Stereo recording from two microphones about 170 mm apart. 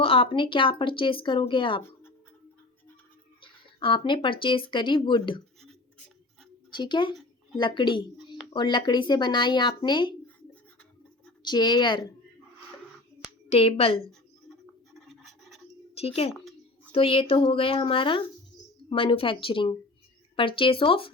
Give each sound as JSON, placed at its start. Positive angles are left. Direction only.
{"t": 0.0, "sound": "speech", "side_deg": 35}
{"t": 1.8, "sound": "a sound", "side_deg": 15}
{"t": 3.4, "sound": "speech", "side_deg": 30}
{"t": 6.7, "sound": "a woman's voice", "side_deg": 25}
{"t": 11.4, "sound": "speech", "side_deg": 25}
{"t": 13.5, "sound": "speech", "side_deg": 35}
{"t": 14.1, "sound": "scratch", "side_deg": 0}
{"t": 16.0, "sound": "a woman's voice", "side_deg": 35}
{"t": 16.3, "sound": "a sound", "side_deg": 0}
{"t": 16.9, "sound": "speech", "side_deg": 30}